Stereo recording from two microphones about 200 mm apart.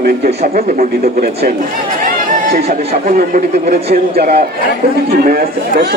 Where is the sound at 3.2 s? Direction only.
50° right (ahead or behind).